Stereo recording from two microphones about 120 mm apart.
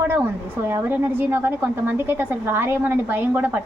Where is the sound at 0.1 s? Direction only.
20° right (ahead or behind).